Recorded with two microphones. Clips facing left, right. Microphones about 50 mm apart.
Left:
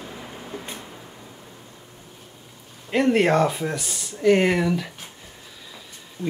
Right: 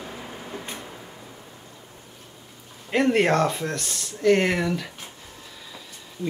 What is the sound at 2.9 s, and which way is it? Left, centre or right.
Speech, centre.